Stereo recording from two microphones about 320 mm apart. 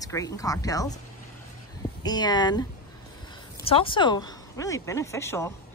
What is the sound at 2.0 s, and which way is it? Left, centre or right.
Speech, centre.